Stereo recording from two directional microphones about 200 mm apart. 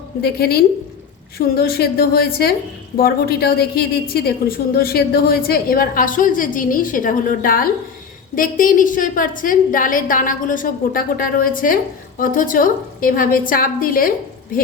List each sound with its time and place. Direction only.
0.2 s a woman's voice: 50° left (ahead or behind)